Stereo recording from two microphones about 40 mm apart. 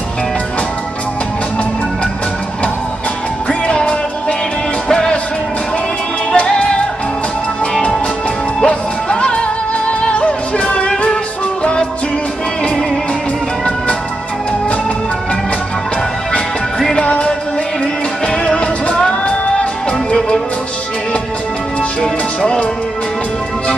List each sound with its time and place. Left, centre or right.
3.4 s music: left
6.3 s music: left
8.6 s music: left
16.9 s music: left
22.0 s music: left